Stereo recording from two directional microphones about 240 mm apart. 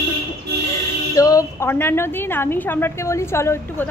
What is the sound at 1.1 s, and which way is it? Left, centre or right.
A woman's voice, centre.